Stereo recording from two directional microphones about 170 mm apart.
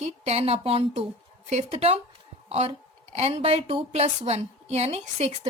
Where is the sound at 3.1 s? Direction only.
35° right (ahead or behind).